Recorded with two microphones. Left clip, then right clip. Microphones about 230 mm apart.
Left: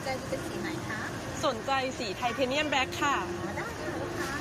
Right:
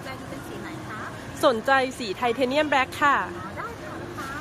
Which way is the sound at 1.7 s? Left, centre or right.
Centre.